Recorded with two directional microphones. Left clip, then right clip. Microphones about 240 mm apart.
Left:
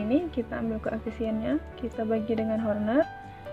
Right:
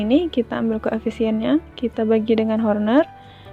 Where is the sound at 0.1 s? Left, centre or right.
Right.